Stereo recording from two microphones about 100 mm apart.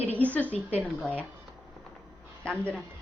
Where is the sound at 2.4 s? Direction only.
10° left (ahead or behind).